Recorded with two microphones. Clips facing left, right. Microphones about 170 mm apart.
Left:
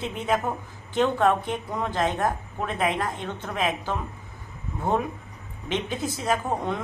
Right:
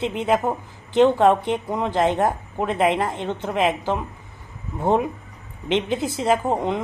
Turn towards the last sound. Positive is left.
turn(degrees=-20)  # may be behind; listen again after turning